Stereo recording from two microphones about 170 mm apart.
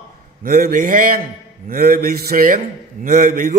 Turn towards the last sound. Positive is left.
turn(degrees=-55)  # may be behind; listen again after turning